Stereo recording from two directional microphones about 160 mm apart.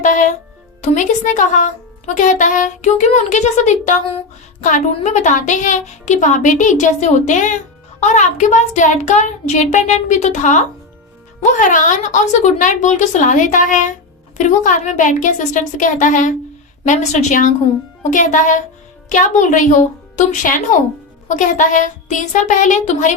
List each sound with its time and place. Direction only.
0.0 s a woman's voice: 55° left (ahead or behind)